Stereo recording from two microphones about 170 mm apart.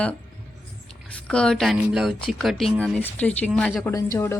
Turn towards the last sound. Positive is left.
turn(degrees=20)  # may be behind; listen again after turning